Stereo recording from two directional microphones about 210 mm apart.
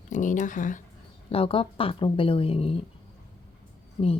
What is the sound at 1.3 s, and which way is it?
Speech, 25° left (ahead or behind).